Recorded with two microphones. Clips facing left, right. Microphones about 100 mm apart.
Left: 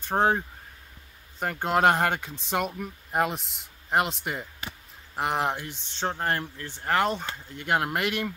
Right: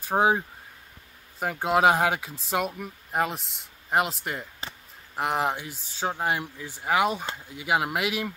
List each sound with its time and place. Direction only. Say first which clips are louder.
0.0 s speech: right 1 dB; 10° right (ahead or behind)
1.4 s speech: right 1 dB; 5° right (ahead or behind)